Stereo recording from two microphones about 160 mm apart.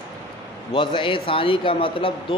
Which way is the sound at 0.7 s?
30° left (ahead or behind).